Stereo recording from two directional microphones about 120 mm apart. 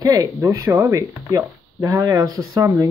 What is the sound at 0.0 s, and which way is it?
Speech, 30° right (ahead or behind).